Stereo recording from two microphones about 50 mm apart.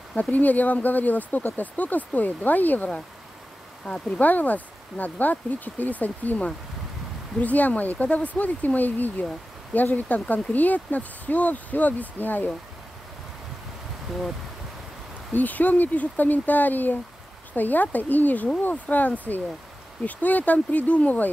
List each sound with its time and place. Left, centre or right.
0.3 s speech: left
4.2 s speech: left
15.3 s speech: left